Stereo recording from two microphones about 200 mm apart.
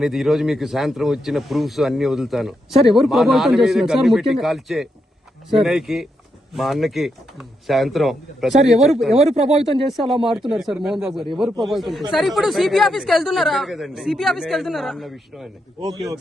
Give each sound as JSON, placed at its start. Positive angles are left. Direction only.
{"t": 0.0, "sound": "a man's voice", "side_deg": 0}
{"t": 9.1, "sound": "speech", "side_deg": -30}
{"t": 9.9, "sound": "a man's voice", "side_deg": 0}